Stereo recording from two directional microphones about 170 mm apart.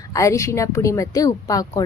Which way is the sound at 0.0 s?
20° left (ahead or behind).